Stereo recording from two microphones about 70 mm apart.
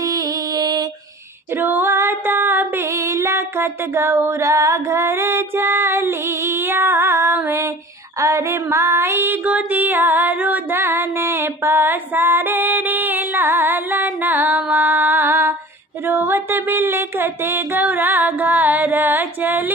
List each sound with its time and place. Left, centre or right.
0.0 s music: right
1.5 s female singing: right
2.8 s female singing: right
8.2 s music: right
9.4 s music: centre; by 15.5 s right
16.0 s a sound: right